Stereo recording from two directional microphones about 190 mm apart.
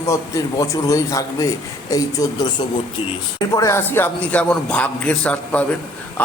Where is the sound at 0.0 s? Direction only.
15° left (ahead or behind).